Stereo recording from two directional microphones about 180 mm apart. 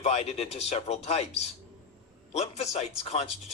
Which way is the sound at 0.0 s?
35° left (ahead or behind).